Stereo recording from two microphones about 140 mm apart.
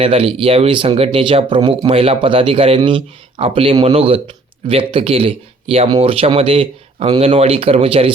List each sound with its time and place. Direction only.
0.0 s speech: 45° right (ahead or behind)